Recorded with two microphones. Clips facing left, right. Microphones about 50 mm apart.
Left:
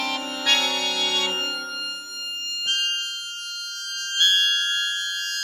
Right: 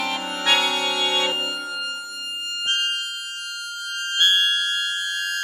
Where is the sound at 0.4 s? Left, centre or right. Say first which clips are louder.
Right 3 dB; centre.